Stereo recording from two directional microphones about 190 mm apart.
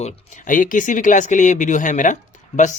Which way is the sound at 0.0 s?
45° left (ahead or behind).